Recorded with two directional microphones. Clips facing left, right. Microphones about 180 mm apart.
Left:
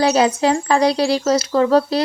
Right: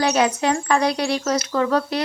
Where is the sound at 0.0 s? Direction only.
30° left (ahead or behind).